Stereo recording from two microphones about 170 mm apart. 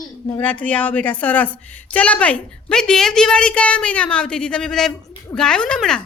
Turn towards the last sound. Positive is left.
turn(degrees=5)  # may be behind; listen again after turning